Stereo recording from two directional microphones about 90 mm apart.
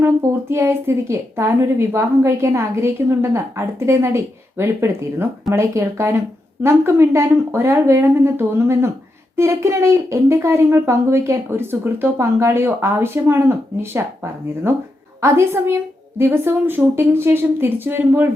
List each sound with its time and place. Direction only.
0.0 s a woman's voice: 30° right (ahead or behind)
15.2 s a woman's voice: 30° right (ahead or behind)